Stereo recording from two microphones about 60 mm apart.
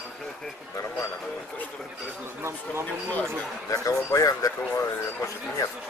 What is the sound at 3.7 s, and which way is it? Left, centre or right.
Speech, left.